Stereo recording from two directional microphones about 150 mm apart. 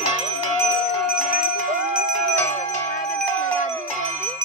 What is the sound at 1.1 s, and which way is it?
Bicycle bell, 10° right (ahead or behind).